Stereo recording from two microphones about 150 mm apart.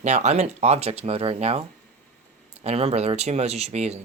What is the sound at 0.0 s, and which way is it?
Speech, 50° right (ahead or behind).